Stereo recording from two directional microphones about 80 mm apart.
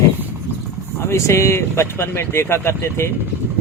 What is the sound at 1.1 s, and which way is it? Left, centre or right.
Speech, left.